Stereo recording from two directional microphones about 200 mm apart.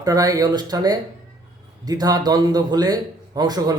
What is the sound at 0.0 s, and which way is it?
Speech, 20° right (ahead or behind).